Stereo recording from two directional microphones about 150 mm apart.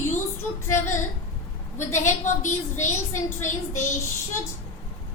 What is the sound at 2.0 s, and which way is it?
A woman's voice, 55° left (ahead or behind).